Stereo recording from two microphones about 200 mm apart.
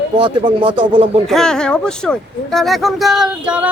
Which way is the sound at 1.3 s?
5° left (ahead or behind).